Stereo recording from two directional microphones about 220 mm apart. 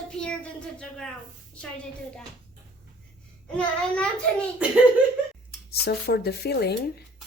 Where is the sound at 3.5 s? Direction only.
5° left (ahead or behind).